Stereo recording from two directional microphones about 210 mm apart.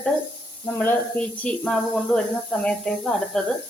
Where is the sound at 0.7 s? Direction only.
10° left (ahead or behind).